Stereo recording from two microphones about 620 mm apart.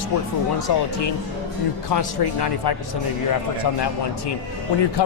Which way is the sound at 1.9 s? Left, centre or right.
Left.